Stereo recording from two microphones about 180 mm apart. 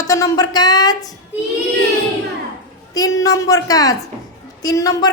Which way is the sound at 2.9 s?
20° left (ahead or behind).